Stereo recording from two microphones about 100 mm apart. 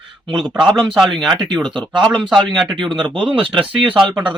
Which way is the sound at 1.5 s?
50° right (ahead or behind).